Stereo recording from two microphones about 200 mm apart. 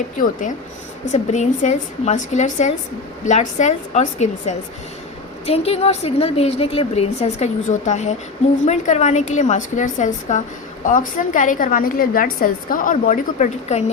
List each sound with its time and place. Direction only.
0.2 s a woman's voice: 40° left (ahead or behind)